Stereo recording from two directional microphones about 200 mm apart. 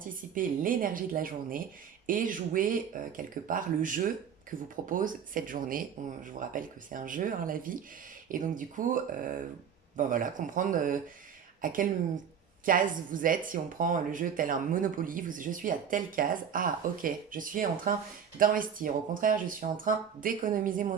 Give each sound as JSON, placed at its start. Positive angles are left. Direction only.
{"t": 0.3, "sound": "speech", "side_deg": -45}
{"t": 10.0, "sound": "speech", "side_deg": -40}